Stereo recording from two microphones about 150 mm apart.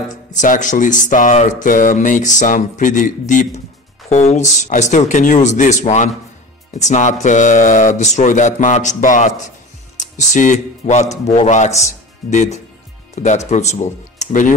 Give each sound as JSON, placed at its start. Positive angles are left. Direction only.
{"t": 0.4, "sound": "speech", "side_deg": 55}